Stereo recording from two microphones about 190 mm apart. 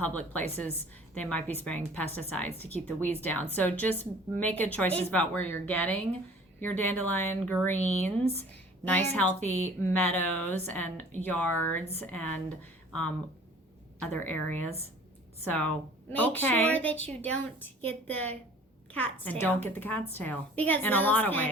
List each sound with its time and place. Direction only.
0.0 s a woman's voice: 10° left (ahead or behind)